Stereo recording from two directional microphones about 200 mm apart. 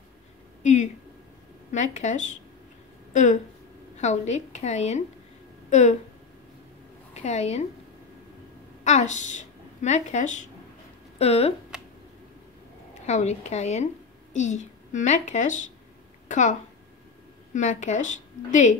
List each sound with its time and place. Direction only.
1.7 s speech: 35° left (ahead or behind)
7.2 s speech: 35° left (ahead or behind)
8.8 s speech: 35° left (ahead or behind)
13.0 s a woman's voice: 35° left (ahead or behind)
17.6 s speech: 35° left (ahead or behind)